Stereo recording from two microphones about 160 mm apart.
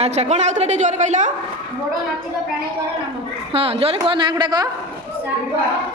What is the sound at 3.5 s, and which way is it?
A woman's voice, 35° right (ahead or behind).